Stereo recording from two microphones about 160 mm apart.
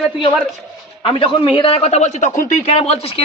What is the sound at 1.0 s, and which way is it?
A woman's voice, 35° left (ahead or behind).